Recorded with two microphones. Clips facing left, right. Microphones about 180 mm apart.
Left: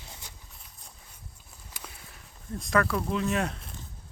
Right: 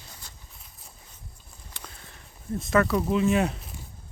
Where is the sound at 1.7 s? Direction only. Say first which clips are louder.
Even; 10° left (ahead or behind).